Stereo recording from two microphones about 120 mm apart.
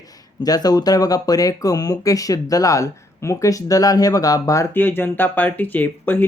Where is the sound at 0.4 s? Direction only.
30° left (ahead or behind).